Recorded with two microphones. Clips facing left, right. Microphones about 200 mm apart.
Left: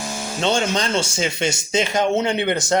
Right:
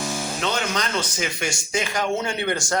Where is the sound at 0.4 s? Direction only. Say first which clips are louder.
Left 7 dB; 30° left (ahead or behind).